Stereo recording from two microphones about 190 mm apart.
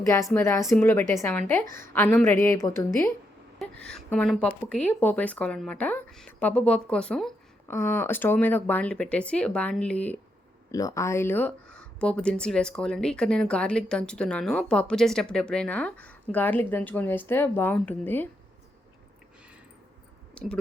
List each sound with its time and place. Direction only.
0.0 s speech: 15° left (ahead or behind)
1.6 s a woman's voice: 45° right (ahead or behind)
1.9 s speech: 10° left (ahead or behind)
3.6 s speech: 5° left (ahead or behind)
10.7 s speech: 15° left (ahead or behind)
20.4 s speech: 5° left (ahead or behind)